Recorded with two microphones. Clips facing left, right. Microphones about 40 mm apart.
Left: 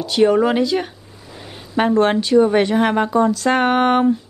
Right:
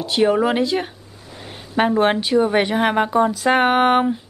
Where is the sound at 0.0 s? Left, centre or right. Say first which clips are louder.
Left 2 dB; centre.